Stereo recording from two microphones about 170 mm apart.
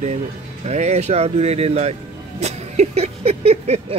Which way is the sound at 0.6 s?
40° right (ahead or behind).